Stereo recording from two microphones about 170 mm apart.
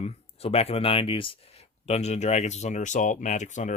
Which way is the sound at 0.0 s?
35° left (ahead or behind).